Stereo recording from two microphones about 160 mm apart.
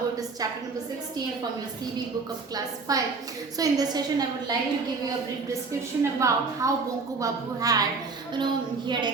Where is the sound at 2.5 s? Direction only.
20° right (ahead or behind).